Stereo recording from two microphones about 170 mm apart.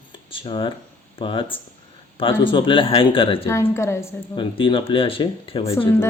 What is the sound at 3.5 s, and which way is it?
Speech, 15° left (ahead or behind).